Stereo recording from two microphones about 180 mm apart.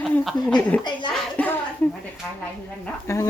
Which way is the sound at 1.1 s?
10° left (ahead or behind).